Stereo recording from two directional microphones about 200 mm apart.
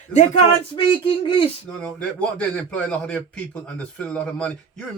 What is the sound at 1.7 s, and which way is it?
A man's voice, 5° left (ahead or behind).